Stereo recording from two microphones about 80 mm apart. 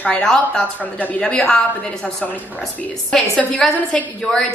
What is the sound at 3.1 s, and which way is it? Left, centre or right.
Speech, centre.